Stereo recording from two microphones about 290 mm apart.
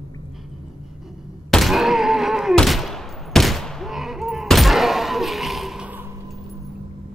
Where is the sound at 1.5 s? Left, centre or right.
Centre.